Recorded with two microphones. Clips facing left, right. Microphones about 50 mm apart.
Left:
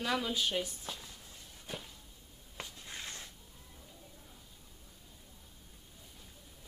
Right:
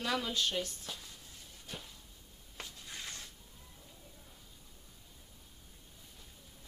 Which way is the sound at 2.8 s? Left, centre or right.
Centre.